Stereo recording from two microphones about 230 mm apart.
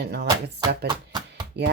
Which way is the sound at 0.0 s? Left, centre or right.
Right.